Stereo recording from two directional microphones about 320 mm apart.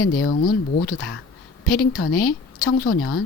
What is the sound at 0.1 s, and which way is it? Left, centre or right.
A woman's voice, left.